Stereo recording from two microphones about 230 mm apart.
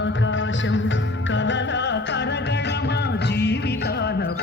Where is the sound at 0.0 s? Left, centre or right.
Left.